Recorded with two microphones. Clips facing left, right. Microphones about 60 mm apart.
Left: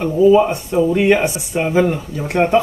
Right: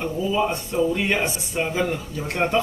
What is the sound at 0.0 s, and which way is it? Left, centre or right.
Speech, left.